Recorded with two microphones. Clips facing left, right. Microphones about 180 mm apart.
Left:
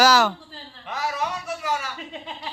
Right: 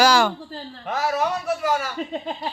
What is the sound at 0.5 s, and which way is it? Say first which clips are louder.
Speech: right 6 dB; 40° right (ahead or behind).